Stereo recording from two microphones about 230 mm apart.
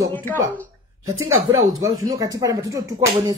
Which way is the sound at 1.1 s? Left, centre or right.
Right.